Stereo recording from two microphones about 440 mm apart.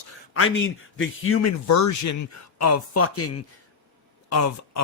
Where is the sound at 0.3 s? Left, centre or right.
Left.